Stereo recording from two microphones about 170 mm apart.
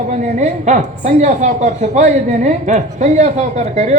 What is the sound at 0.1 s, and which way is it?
A woman's voice, 45° right (ahead or behind).